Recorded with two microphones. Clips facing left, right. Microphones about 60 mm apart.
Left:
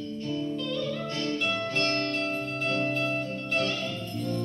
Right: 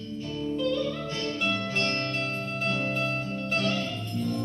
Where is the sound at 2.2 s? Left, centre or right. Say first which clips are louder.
Left 1 dB; centre.